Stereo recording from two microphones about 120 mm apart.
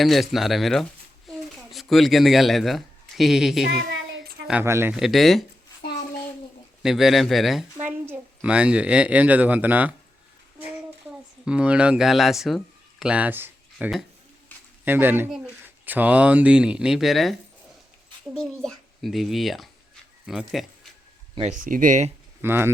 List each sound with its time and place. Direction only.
0.0 s speech: centre (ahead or behind)
4.6 s speech: 20° right (ahead or behind)
4.9 s speech: centre (ahead or behind)
6.8 s speech: centre (ahead or behind)
7.8 s speech: 15° right (ahead or behind)
11.4 s speech: 10° right (ahead or behind)
13.7 s speech: 5° right (ahead or behind)
14.8 s speech: 15° right (ahead or behind); by 17.3 s centre (ahead or behind)
18.3 s a child's voice: 5° left (ahead or behind)
21.4 s speech: 90° right
22.4 s speech: 20° right (ahead or behind)